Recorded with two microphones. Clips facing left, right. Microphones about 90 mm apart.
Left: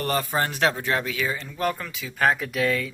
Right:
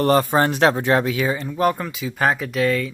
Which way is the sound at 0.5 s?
35° right (ahead or behind).